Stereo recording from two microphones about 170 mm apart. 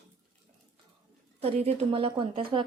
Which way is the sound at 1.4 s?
35° right (ahead or behind).